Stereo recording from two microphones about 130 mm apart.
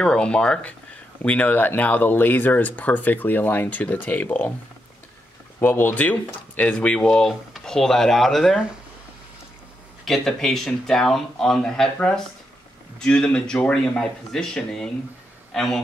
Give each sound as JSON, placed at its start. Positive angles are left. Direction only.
{"t": 0.0, "sound": "speech", "side_deg": 5}
{"t": 5.6, "sound": "speech", "side_deg": 15}
{"t": 10.0, "sound": "a man's voice", "side_deg": 0}